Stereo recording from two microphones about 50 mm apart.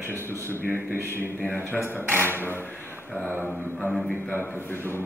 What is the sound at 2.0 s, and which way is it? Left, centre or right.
Speech, right.